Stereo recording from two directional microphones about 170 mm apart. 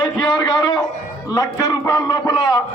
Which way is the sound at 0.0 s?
20° left (ahead or behind).